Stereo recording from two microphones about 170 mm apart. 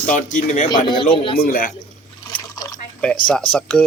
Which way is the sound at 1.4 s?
60° left (ahead or behind).